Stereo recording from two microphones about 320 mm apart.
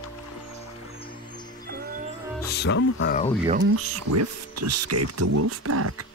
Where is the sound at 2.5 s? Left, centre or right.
Left.